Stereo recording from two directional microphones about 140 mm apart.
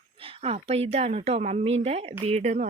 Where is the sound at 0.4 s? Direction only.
45° right (ahead or behind).